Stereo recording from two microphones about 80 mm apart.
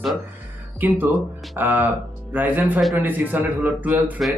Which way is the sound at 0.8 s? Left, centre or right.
Right.